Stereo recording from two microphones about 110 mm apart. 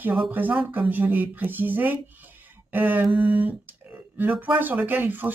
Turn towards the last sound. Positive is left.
turn(degrees=-15)  # may be behind; listen again after turning